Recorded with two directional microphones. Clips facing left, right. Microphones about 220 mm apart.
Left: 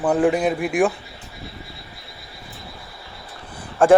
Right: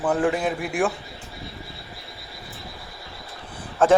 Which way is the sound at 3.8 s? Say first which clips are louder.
Left 4 dB; 15° left (ahead or behind).